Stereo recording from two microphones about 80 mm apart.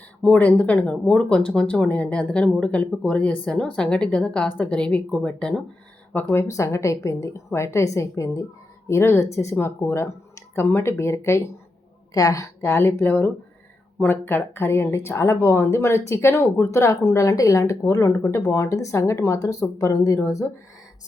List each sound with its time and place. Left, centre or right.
0.3 s speech: centre
6.5 s a woman's voice: left
8.9 s speech: left
12.1 s speech: left